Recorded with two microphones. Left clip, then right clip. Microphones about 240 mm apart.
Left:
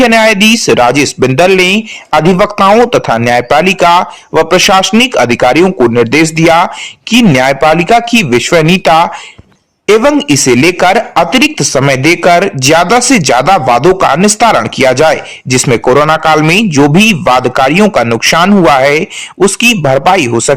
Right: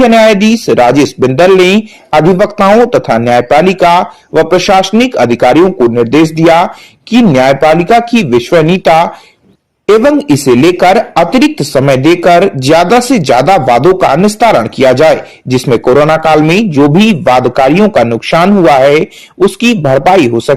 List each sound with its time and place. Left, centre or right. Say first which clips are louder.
0.2 s speech: even; left
2.9 s speech: right 1 dB; left
3.8 s speech: even; left
4.8 s speech: even; left
10.2 s speech: even; centre
19.8 s speech: right 3 dB; left
20.1 s speech: right 2 dB; left